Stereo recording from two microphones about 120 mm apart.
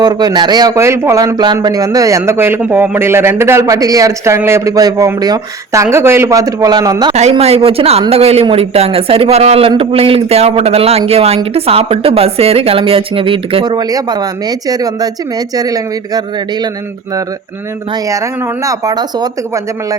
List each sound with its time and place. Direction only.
0.0 s speech: 35° right (ahead or behind)
0.8 s speech: 25° right (ahead or behind)
7.1 s a man's voice: 60° right (ahead or behind)
13.7 s speech: 35° right (ahead or behind)
18.6 s speech: 30° right (ahead or behind)